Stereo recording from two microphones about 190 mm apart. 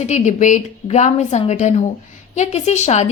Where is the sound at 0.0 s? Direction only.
40° left (ahead or behind).